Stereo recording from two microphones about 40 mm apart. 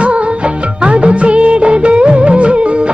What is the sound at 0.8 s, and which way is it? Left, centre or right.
Music of bollywood, right.